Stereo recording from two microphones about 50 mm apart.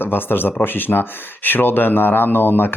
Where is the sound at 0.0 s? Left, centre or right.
Left.